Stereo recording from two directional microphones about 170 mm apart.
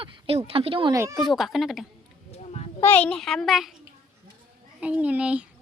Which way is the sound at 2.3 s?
40° left (ahead or behind).